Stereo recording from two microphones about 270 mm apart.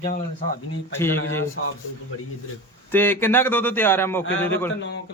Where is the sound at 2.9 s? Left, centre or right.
Centre.